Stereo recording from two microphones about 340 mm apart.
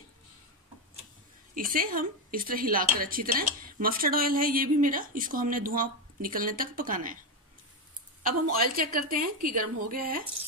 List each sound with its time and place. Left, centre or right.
1.5 s speech: right
8.2 s speech: right